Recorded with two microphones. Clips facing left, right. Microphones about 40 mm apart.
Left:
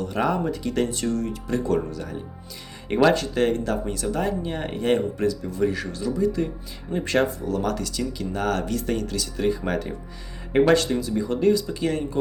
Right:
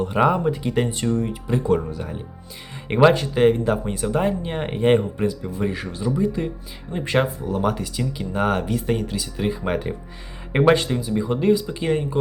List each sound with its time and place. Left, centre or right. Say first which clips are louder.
0.0 s speech: right 5 dB; right